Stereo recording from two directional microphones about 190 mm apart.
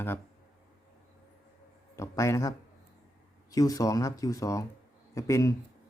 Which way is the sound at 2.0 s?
15° left (ahead or behind).